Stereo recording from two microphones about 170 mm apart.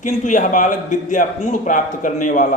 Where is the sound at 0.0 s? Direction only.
50° left (ahead or behind).